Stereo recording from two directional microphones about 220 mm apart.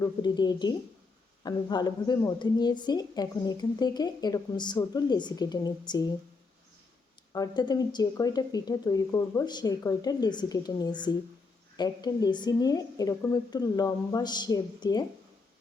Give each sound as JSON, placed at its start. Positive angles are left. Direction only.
{"t": 0.0, "sound": "a woman's voice", "side_deg": 20}
{"t": 7.3, "sound": "speech", "side_deg": 20}